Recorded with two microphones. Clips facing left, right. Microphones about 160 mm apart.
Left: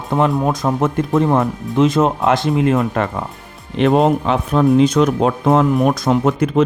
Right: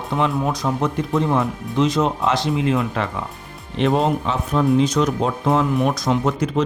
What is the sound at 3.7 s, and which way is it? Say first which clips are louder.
Speech: left 5 dB; 60° left (ahead or behind).